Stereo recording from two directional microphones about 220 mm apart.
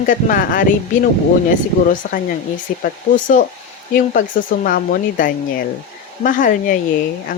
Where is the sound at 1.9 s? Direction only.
35° left (ahead or behind).